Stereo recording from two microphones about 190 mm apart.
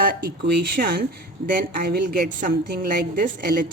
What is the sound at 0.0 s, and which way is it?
A woman's voice, 50° right (ahead or behind).